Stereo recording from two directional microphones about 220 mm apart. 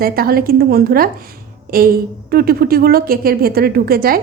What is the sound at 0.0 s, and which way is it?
A woman's voice, 40° right (ahead or behind).